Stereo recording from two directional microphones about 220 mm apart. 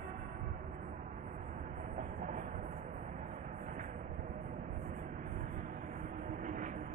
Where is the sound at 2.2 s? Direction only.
30° right (ahead or behind).